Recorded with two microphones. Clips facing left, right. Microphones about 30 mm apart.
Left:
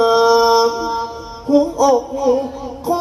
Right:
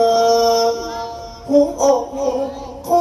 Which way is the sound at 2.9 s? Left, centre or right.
Left.